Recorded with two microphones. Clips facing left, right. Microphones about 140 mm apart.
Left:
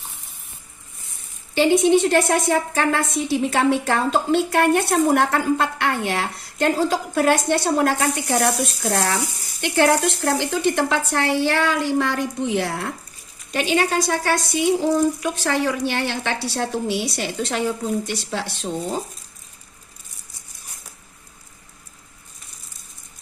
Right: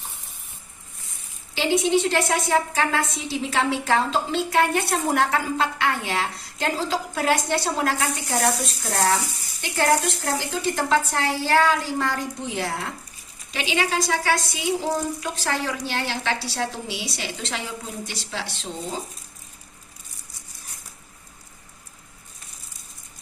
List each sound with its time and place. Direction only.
1.5 s a woman's voice: 55° left (ahead or behind)
13.5 s a woman's voice: 50° left (ahead or behind)